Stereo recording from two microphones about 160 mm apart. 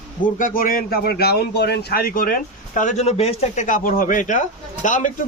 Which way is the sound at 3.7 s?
60° left (ahead or behind).